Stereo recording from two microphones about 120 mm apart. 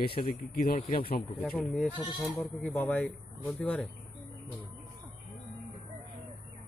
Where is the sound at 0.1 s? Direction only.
50° left (ahead or behind).